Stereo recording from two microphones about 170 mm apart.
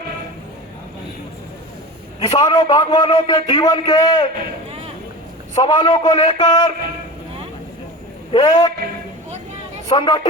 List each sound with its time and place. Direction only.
2.2 s a man's voice: 25° left (ahead or behind)
5.6 s a man's voice: 30° left (ahead or behind)
8.3 s a man's voice: 25° left (ahead or behind)
9.9 s a man's voice: 30° left (ahead or behind)